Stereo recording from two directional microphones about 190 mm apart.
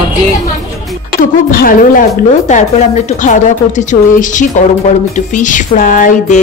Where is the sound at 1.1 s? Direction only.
50° left (ahead or behind).